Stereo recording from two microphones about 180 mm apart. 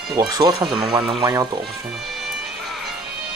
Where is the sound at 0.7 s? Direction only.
5° right (ahead or behind).